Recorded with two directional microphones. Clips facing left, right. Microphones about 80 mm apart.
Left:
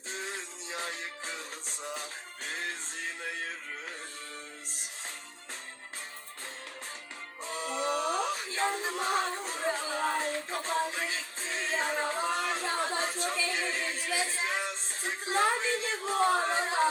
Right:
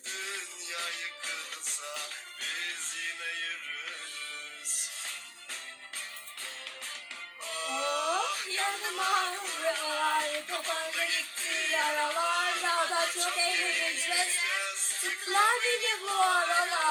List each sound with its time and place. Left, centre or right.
0.1 s music: left
7.4 s music: left
13.0 s a sound: left
13.5 s music: left